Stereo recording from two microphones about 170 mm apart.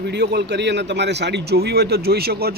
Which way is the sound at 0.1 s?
80° right.